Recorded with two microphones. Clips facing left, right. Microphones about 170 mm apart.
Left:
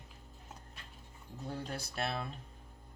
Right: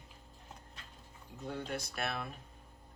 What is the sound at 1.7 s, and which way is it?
Speech, 30° left (ahead or behind).